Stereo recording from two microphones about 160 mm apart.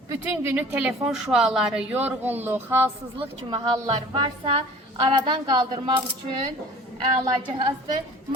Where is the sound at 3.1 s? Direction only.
30° right (ahead or behind).